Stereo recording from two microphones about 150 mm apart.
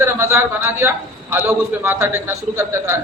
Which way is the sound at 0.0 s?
15° right (ahead or behind).